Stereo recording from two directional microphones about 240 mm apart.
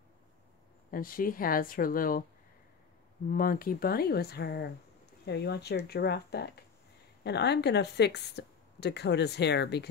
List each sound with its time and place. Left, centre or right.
0.9 s speech: left
3.3 s a woman's voice: left